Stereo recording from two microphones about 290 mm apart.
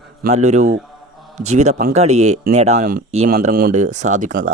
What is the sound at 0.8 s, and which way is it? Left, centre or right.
Mantra, centre.